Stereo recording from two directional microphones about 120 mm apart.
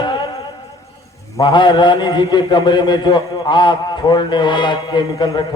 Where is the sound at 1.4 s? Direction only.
40° left (ahead or behind).